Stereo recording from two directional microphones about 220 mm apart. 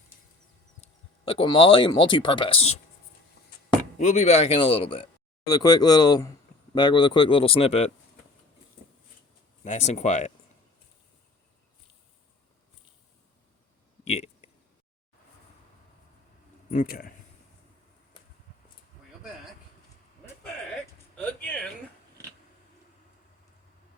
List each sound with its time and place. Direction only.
1.2 s speech: 25° left (ahead or behind)
3.9 s speech: 35° left (ahead or behind)
9.6 s speech: 30° left (ahead or behind)
14.0 s a sound: 30° left (ahead or behind)
16.6 s speech: 40° left (ahead or behind)
21.4 s a sound: 5° left (ahead or behind)